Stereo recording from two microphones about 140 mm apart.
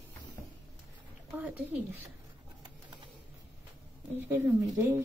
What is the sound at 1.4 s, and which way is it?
Speech, 10° right (ahead or behind).